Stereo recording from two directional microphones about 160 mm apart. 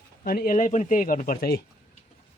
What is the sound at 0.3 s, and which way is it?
Speech, 65° left (ahead or behind).